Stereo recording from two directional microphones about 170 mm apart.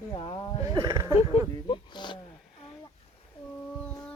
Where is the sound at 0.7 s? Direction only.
20° right (ahead or behind).